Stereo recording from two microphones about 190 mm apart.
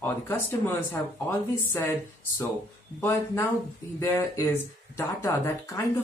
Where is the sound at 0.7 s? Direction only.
10° left (ahead or behind).